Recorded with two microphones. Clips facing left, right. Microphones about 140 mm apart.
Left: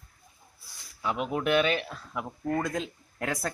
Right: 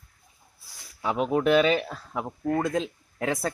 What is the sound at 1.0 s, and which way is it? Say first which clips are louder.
Speech: right 5 dB; 35° right (ahead or behind).